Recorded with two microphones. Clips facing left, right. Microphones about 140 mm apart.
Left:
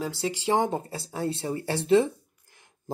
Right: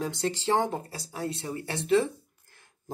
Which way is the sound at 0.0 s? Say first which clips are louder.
Even; 5° left (ahead or behind).